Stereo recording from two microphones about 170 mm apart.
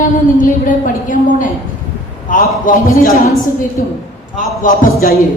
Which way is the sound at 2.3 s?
50° left (ahead or behind).